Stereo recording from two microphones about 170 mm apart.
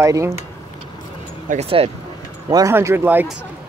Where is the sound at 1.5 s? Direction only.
35° right (ahead or behind).